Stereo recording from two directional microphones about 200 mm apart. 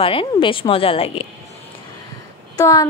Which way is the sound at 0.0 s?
25° left (ahead or behind).